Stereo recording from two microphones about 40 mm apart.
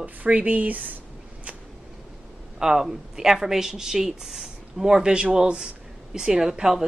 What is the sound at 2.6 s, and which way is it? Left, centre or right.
Speech, centre.